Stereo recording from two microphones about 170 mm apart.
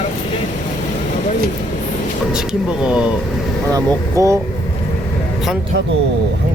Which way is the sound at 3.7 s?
20° right (ahead or behind).